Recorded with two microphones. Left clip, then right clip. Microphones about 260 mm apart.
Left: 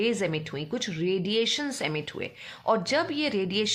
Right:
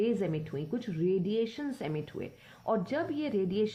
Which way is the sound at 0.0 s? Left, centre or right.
Left.